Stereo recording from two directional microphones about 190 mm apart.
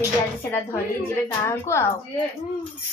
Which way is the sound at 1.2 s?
15° left (ahead or behind).